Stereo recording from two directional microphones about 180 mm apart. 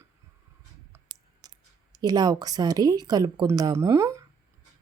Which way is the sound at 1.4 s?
20° right (ahead or behind).